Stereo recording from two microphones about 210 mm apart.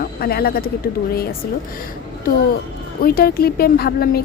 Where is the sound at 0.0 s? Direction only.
45° left (ahead or behind).